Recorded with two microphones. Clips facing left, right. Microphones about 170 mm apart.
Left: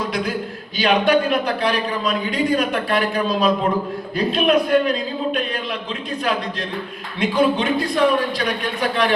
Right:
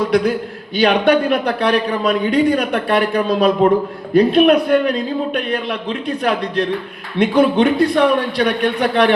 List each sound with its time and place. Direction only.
0.8 s a man's voice: 60° right (ahead or behind)
7.2 s a man's voice: 60° right (ahead or behind)